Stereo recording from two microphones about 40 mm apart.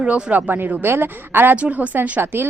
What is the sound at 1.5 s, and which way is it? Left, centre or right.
Speech, right.